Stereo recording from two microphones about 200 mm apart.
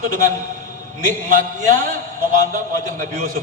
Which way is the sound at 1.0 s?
40° right (ahead or behind).